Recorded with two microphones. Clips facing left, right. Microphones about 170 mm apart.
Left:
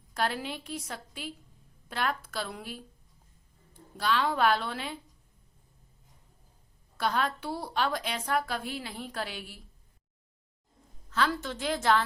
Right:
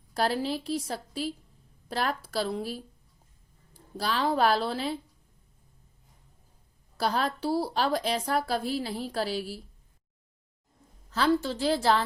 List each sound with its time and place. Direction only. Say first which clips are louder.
0.1 s a woman's voice: right 4 dB; 35° right (ahead or behind)
3.9 s a woman's voice: right 1 dB; 35° right (ahead or behind)
6.9 s a woman's voice: right 2 dB; 35° right (ahead or behind)
11.1 s a woman's voice: right 5 dB; 30° right (ahead or behind)